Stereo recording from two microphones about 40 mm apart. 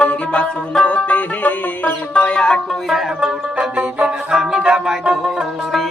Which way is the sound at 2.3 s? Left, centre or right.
Left.